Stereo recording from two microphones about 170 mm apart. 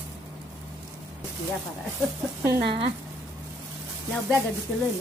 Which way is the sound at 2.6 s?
35° right (ahead or behind).